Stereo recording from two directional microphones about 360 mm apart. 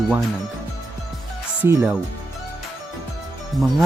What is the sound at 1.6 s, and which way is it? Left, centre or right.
Speech, centre.